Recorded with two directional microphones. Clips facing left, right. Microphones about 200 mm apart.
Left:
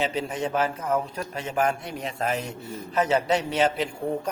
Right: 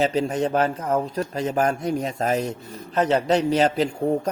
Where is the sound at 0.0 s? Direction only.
40° right (ahead or behind).